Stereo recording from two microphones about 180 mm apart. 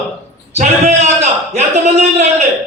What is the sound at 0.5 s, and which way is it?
A man's voice, 40° right (ahead or behind).